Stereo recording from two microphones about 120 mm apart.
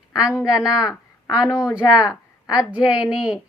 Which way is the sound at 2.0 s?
30° left (ahead or behind).